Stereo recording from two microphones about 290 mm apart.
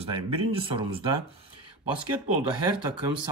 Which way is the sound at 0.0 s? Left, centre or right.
Centre.